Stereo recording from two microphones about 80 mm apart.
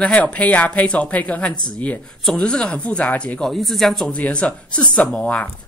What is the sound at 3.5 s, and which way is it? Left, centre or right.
Speech, centre.